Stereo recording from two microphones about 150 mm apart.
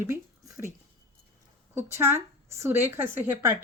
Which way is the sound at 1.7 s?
15° right (ahead or behind).